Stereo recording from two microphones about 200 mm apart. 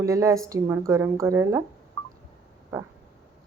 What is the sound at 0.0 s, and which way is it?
A woman's voice, 15° right (ahead or behind).